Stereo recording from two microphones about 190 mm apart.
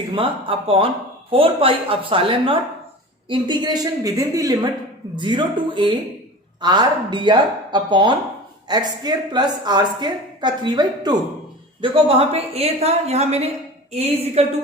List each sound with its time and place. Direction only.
0.1 s a woman's voice: 25° right (ahead or behind)